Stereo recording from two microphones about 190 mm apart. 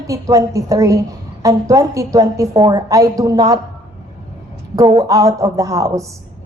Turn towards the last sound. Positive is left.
turn(degrees=-15)  # may be behind; listen again after turning